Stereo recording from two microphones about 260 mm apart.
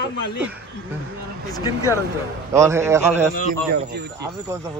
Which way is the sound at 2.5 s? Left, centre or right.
Centre.